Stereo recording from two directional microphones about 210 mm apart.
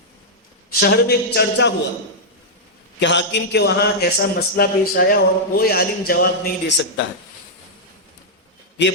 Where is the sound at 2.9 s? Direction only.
55° left (ahead or behind).